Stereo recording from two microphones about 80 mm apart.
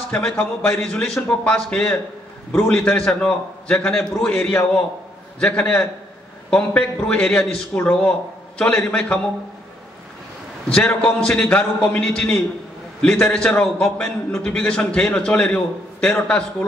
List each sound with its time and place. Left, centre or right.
0.1 s a man's voice: centre
4.4 s a man's voice: left
10.7 s a man's voice: centre